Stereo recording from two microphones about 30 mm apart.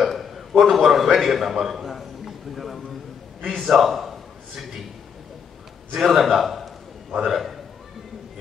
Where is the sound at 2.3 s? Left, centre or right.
Centre.